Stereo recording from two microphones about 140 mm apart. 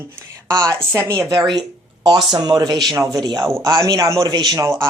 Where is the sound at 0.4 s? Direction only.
25° right (ahead or behind).